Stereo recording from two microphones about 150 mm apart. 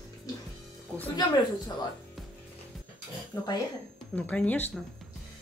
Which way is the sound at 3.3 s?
20° left (ahead or behind).